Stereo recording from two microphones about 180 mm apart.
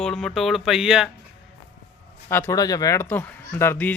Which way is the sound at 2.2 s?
15° left (ahead or behind).